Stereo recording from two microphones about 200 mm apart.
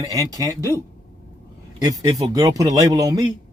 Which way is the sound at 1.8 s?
20° right (ahead or behind).